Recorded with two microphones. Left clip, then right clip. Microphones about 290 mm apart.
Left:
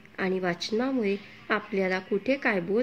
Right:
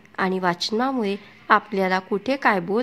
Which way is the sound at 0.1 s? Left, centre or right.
Right.